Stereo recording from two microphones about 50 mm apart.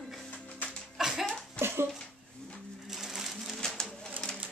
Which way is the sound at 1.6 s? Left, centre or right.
Right.